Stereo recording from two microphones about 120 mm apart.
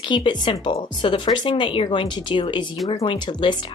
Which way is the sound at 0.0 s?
45° left (ahead or behind).